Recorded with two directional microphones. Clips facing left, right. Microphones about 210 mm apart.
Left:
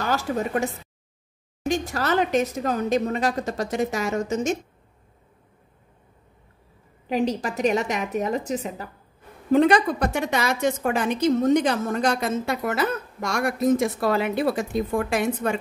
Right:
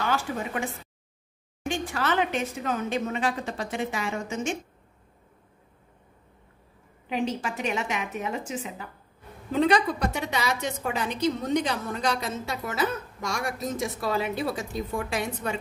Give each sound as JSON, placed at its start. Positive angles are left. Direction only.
{"t": 0.0, "sound": "speech", "side_deg": 40}
{"t": 7.1, "sound": "speech", "side_deg": 40}
{"t": 9.5, "sound": "a woman's voice", "side_deg": 50}